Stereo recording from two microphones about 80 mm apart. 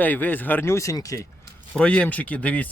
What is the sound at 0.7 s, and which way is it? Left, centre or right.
Speech, left.